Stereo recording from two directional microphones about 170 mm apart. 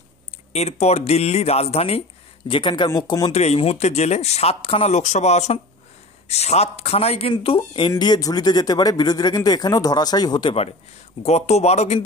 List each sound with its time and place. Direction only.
0.5 s speech: 40° left (ahead or behind); by 10.5 s 25° left (ahead or behind)
11.2 s speech: 40° left (ahead or behind)